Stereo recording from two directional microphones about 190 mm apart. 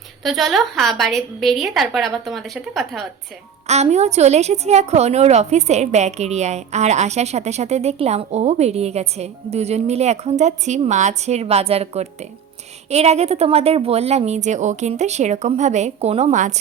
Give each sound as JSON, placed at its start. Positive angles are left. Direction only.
{"t": 0.2, "sound": "a woman's voice", "side_deg": 0}
{"t": 3.7, "sound": "a woman's voice", "side_deg": -35}